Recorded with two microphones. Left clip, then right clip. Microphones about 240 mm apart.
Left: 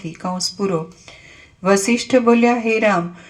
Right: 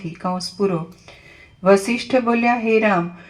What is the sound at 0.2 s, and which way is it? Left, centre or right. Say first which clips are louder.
Speech: right 1 dB; left.